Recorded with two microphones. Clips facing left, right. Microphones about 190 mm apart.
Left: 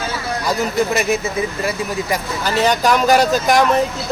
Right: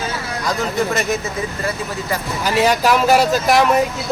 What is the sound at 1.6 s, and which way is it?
Speech, 15° left (ahead or behind).